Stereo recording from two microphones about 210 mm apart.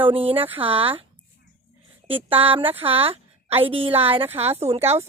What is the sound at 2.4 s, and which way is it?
A woman's voice, 25° right (ahead or behind).